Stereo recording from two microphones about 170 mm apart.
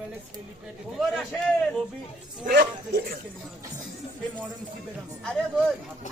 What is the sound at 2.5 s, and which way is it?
Speech, 70° right (ahead or behind).